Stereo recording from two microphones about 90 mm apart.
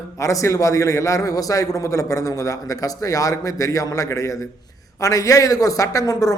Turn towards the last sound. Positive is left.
turn(degrees=45)  # may be behind; listen again after turning